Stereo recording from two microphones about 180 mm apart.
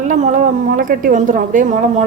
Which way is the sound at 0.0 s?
45° right (ahead or behind).